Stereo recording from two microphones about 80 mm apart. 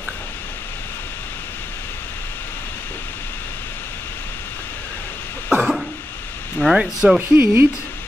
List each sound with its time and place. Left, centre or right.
5.6 s cough: centre
6.6 s speech: centre
7.2 s speech: right